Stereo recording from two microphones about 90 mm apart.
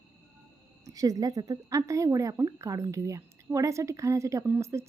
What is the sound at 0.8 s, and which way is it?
Speech, 40° right (ahead or behind).